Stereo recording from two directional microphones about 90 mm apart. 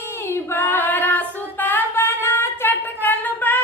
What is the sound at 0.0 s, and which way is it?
Child singing, 25° left (ahead or behind).